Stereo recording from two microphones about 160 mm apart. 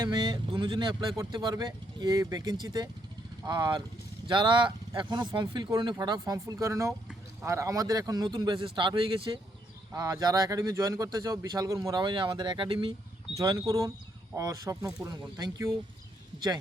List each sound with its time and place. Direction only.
0.0 s speech: 30° right (ahead or behind)
9.9 s speech: 20° right (ahead or behind)
13.3 s speech: 20° right (ahead or behind)